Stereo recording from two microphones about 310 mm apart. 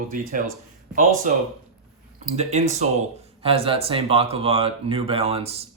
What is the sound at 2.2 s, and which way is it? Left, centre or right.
Speech, right.